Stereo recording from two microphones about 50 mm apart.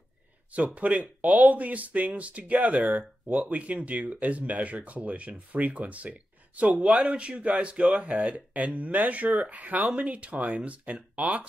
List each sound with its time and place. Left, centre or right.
0.7 s speech: right